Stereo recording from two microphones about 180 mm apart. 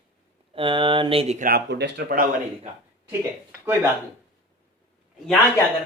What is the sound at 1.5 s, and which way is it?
Speech, 65° right (ahead or behind).